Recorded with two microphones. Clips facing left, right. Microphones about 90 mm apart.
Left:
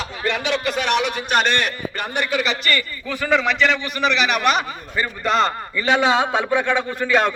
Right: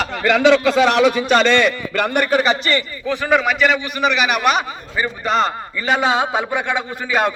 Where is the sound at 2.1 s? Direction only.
45° right (ahead or behind).